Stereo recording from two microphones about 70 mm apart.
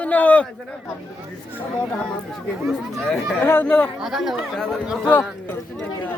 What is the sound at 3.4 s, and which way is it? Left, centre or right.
Speech, left.